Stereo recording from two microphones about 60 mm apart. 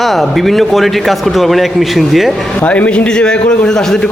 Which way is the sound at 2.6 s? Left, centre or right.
Left.